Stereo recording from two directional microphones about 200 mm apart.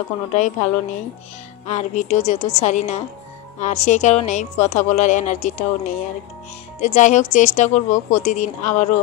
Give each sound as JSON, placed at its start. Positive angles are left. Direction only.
{"t": 0.3, "sound": "a woman's voice", "side_deg": 35}